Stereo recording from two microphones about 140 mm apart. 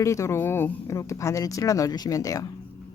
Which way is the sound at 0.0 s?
20° left (ahead or behind).